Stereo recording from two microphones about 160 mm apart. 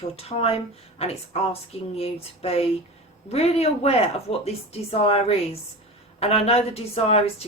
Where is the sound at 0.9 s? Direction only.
40° left (ahead or behind).